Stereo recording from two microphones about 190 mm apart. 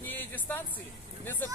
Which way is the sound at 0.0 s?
10° left (ahead or behind).